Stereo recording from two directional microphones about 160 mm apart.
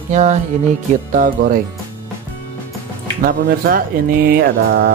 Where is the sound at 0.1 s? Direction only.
50° right (ahead or behind).